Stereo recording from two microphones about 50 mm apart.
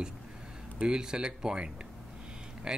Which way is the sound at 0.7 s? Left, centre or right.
Centre.